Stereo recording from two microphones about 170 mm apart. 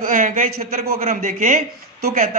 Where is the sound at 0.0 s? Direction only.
50° right (ahead or behind).